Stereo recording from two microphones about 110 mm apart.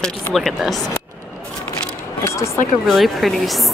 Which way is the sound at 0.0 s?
Centre (ahead or behind).